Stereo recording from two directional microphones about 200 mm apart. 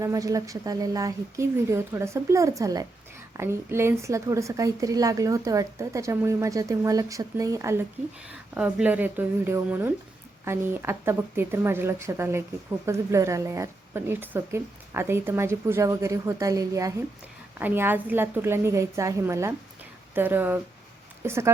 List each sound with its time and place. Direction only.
0.0 s a woman's voice: 15° right (ahead or behind)